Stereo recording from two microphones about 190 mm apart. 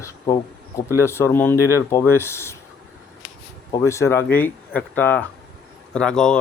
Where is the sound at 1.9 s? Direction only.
15° left (ahead or behind).